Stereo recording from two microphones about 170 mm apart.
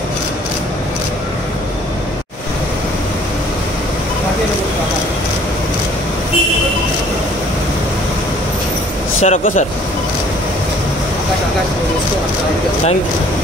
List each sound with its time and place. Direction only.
9.2 s speech: 45° left (ahead or behind)